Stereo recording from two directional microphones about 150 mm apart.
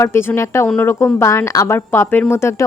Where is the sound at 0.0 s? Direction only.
15° left (ahead or behind).